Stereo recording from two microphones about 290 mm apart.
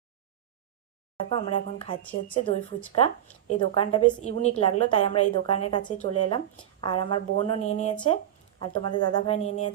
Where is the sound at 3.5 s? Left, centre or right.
Centre.